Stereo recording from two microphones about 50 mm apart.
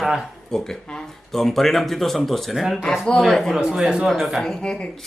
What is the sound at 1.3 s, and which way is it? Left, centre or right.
A woman's voice, centre.